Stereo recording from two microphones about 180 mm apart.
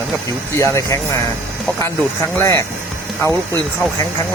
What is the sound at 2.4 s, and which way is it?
Speech, 15° left (ahead or behind).